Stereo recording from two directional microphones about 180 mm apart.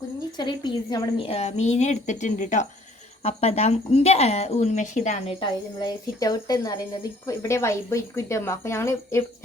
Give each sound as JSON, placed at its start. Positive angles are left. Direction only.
{"t": 0.3, "sound": "speech", "side_deg": 25}